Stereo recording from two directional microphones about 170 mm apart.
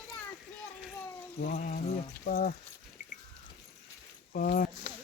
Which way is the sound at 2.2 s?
60° left (ahead or behind).